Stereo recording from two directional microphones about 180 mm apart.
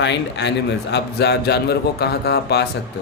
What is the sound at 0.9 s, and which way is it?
Speech, 65° left (ahead or behind).